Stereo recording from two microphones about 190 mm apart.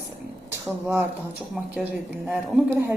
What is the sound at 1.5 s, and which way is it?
A woman's voice, 5° right (ahead or behind).